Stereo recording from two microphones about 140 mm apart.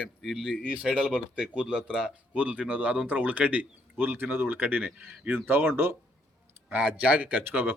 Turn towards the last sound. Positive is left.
turn(degrees=-15)  # may be behind; listen again after turning